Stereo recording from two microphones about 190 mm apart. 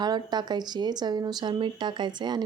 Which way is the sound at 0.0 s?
20° right (ahead or behind).